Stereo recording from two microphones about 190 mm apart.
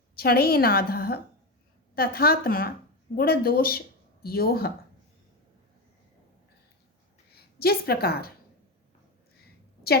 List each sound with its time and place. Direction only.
0.2 s a woman's voice: 55° left (ahead or behind)
7.3 s a woman's voice: 55° left (ahead or behind)